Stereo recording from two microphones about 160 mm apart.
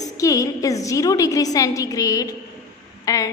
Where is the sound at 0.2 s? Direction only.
20° left (ahead or behind).